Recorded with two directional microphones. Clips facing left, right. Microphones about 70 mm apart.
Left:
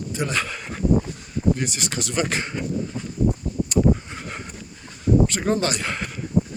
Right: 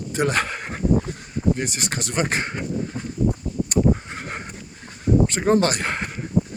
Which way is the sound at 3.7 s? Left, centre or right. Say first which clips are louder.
Even; right.